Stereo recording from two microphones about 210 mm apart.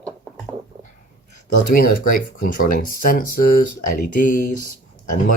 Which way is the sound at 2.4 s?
40° left (ahead or behind).